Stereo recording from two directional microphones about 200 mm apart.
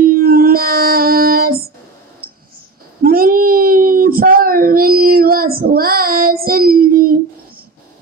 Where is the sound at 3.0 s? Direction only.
45° right (ahead or behind).